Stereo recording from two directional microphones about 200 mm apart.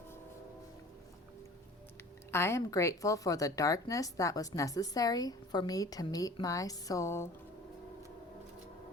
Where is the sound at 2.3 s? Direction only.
15° left (ahead or behind).